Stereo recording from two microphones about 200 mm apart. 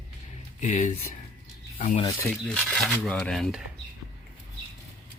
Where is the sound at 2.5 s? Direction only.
5° left (ahead or behind).